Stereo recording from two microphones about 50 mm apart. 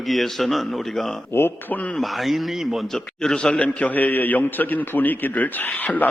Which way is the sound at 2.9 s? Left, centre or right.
Centre.